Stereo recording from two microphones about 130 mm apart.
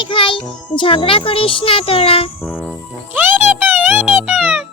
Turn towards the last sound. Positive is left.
turn(degrees=-10)  # may be behind; listen again after turning